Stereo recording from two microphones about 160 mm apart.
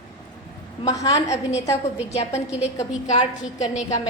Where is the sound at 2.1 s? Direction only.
40° left (ahead or behind).